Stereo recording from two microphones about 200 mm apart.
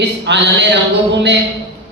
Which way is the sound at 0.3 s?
60° right (ahead or behind).